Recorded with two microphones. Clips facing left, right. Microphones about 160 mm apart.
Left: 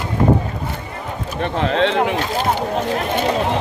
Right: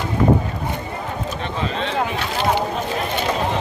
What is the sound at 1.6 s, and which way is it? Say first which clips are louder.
Speech: left 6 dB; 85° left.